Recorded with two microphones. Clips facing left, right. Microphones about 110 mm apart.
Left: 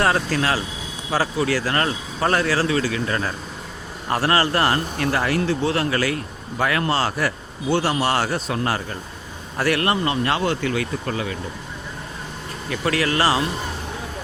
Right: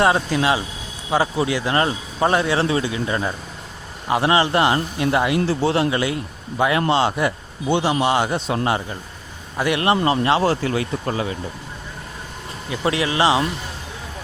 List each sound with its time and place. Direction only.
0.0 s a man's voice: 15° right (ahead or behind)
5.5 s speech: 30° right (ahead or behind)
12.7 s speech: 20° right (ahead or behind)